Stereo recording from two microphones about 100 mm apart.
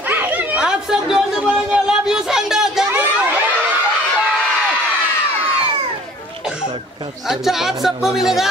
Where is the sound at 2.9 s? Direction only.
20° right (ahead or behind).